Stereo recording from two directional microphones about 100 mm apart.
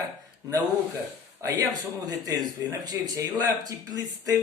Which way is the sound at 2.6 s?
35° right (ahead or behind).